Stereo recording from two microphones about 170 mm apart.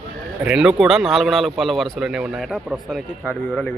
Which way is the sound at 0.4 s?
5° right (ahead or behind).